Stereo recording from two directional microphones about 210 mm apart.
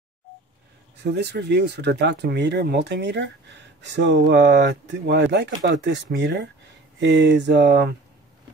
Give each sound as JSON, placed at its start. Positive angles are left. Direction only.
{"t": 1.0, "sound": "speech", "side_deg": -55}